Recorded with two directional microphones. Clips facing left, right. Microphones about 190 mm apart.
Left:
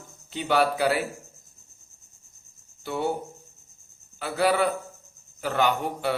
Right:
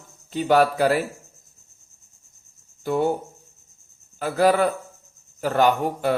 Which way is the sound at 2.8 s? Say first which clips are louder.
Right 6 dB; 45° right (ahead or behind).